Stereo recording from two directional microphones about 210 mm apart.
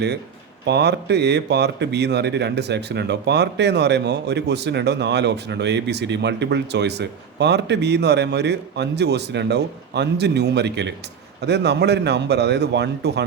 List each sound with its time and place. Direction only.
0.6 s speech: 55° right (ahead or behind)